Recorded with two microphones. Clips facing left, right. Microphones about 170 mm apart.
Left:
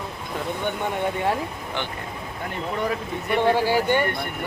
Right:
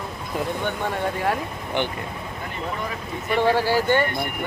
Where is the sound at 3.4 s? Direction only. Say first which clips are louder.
Even; 15° left (ahead or behind).